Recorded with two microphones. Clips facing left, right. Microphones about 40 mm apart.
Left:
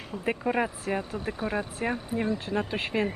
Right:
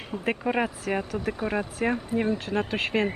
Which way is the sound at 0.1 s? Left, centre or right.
Right.